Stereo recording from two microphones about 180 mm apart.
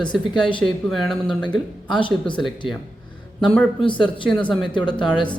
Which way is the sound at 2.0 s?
25° left (ahead or behind).